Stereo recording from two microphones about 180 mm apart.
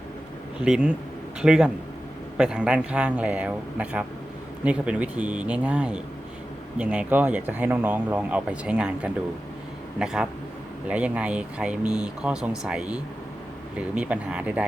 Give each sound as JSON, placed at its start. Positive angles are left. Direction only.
{"t": 0.6, "sound": "speech", "side_deg": -5}